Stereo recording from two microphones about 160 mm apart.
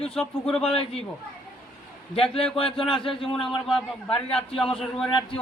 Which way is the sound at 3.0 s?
35° left (ahead or behind).